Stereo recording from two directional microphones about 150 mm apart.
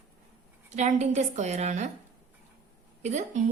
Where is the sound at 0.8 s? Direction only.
50° right (ahead or behind).